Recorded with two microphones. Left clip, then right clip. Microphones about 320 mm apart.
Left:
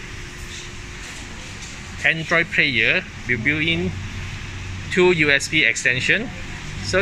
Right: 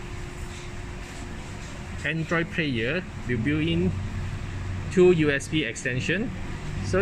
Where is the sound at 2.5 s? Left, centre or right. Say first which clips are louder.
Left 10 dB; left.